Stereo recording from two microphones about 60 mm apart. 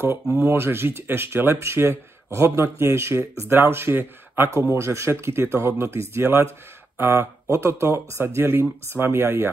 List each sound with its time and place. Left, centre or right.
0.4 s speech: right
4.5 s speech: right